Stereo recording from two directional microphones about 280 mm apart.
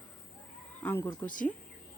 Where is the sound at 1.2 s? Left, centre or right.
Left.